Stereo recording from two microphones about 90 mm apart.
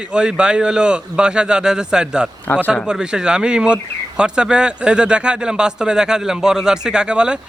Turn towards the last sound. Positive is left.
turn(degrees=-10)  # may be behind; listen again after turning